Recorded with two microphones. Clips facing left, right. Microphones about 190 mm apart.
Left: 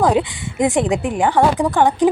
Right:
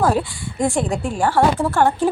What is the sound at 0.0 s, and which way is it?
A woman's voice, 20° left (ahead or behind).